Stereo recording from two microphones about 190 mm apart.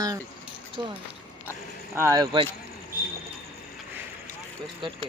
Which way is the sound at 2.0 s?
15° right (ahead or behind).